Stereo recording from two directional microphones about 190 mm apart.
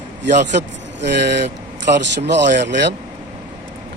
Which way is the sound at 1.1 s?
65° right (ahead or behind).